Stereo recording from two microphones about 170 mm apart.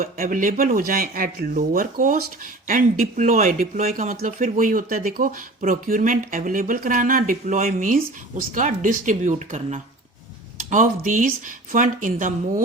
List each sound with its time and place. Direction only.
0.0 s speech: 55° right (ahead or behind)